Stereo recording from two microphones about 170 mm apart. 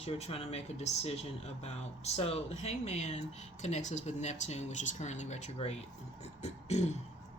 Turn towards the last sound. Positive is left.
turn(degrees=40)  # may be behind; listen again after turning